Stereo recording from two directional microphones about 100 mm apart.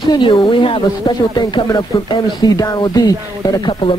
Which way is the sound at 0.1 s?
55° left (ahead or behind).